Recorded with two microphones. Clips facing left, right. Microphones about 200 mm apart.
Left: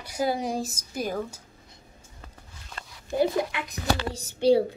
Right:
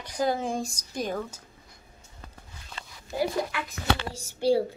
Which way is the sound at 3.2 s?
20° left (ahead or behind).